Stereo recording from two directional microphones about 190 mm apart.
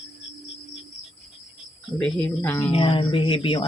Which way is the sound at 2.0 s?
5° left (ahead or behind).